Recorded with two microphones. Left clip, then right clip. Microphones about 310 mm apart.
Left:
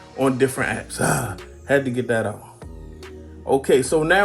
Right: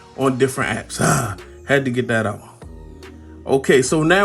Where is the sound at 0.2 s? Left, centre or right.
Right.